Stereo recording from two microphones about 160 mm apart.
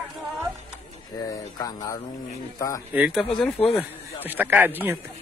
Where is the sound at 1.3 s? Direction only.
20° left (ahead or behind).